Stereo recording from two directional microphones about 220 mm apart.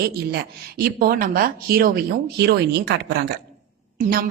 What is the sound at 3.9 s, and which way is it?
Speech, 40° right (ahead or behind).